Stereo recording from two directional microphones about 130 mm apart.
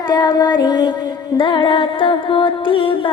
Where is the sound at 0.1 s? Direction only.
30° left (ahead or behind).